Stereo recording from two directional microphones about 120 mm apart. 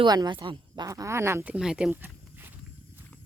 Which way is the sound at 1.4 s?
5° right (ahead or behind).